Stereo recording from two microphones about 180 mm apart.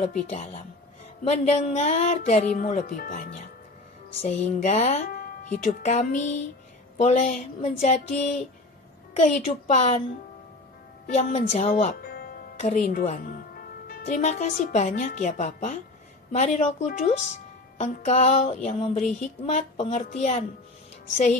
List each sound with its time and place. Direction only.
0.0 s speech: 35° left (ahead or behind)
11.1 s speech: 40° left (ahead or behind)
12.0 s music: 60° left (ahead or behind)
12.5 s speech: 45° left (ahead or behind)
13.3 s a woman's voice: 55° left (ahead or behind)